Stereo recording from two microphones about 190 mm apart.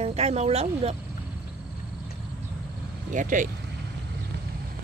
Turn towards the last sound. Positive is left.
turn(degrees=-45)  # may be behind; listen again after turning